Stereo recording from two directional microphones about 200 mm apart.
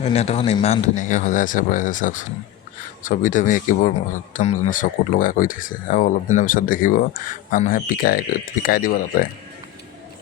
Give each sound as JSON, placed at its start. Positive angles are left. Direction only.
{"t": 0.0, "sound": "speech", "side_deg": 30}